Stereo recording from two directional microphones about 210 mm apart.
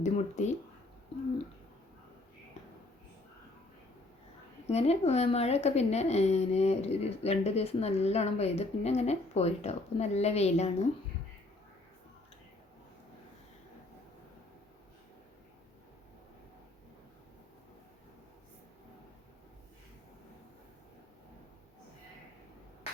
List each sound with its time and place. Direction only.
0.0 s speech: 35° left (ahead or behind)
4.6 s speech: 30° left (ahead or behind)